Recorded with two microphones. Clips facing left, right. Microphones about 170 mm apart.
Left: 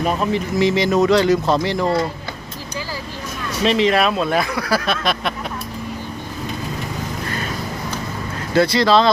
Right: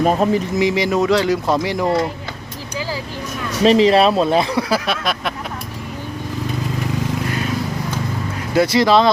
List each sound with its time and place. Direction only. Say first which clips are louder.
0.0 s speech: right 4 dB; 40° right (ahead or behind)
0.6 s speech: left 4 dB; 10° right (ahead or behind)
3.6 s speech: right 4 dB; 35° right (ahead or behind)
4.9 s speech: left 1 dB; 5° right (ahead or behind)
8.5 s speech: right 1 dB; 20° right (ahead or behind)